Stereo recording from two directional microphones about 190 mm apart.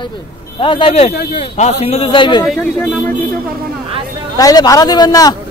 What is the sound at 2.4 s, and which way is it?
Speech, centre (ahead or behind).